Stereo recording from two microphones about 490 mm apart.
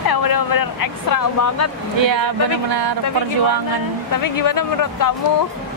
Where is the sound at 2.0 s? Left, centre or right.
Right.